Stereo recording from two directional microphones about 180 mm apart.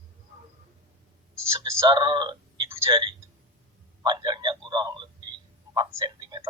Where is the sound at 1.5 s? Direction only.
20° right (ahead or behind).